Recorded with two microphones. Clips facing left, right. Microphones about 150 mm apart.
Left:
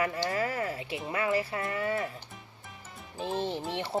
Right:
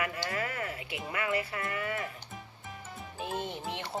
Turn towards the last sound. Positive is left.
turn(degrees=30)  # may be behind; listen again after turning